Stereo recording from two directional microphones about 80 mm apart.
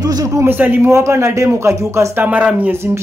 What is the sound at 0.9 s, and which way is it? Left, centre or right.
Speech, right.